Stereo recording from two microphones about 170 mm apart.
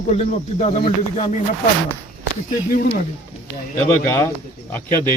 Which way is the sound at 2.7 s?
60° left (ahead or behind).